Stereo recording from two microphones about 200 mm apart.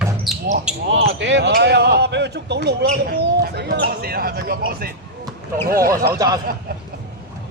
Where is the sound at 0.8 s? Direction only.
70° right (ahead or behind); by 6.0 s 45° right (ahead or behind).